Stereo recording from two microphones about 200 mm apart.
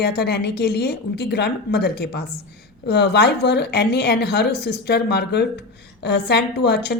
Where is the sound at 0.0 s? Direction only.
55° left (ahead or behind).